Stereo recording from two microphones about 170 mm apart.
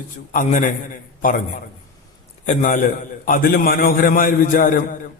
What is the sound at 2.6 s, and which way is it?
A man's voice, 50° left (ahead or behind).